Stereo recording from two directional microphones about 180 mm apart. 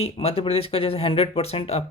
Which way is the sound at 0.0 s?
35° left (ahead or behind).